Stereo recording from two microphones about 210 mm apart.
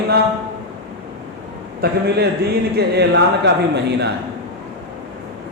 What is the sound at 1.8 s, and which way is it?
A man's voice, 45° right (ahead or behind).